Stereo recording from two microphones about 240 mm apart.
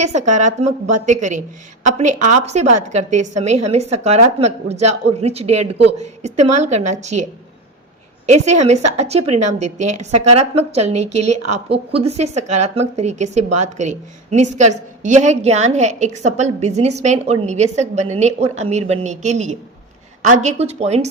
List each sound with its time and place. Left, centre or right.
0.0 s speech: right
8.3 s speech: right